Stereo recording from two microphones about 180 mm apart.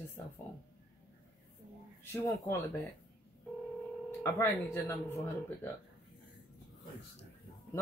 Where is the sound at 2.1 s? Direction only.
15° left (ahead or behind).